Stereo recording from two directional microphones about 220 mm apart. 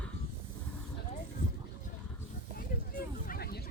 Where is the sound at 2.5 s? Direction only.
40° left (ahead or behind).